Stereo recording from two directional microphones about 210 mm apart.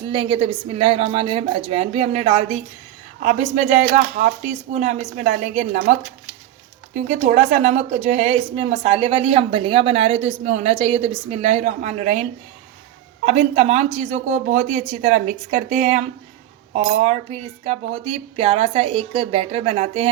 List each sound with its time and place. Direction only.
0.0 s a woman's voice: 25° right (ahead or behind)
13.2 s a woman's voice: 30° right (ahead or behind)